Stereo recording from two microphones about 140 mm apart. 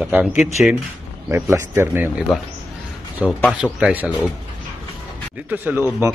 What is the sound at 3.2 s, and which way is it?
Speech, 5° right (ahead or behind).